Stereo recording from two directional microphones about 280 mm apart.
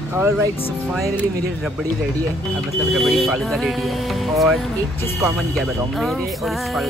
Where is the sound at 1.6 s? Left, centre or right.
Centre.